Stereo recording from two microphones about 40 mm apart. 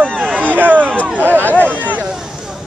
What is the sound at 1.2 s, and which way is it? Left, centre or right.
Speech, right.